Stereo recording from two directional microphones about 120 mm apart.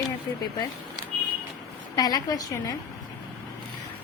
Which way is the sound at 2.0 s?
35° left (ahead or behind).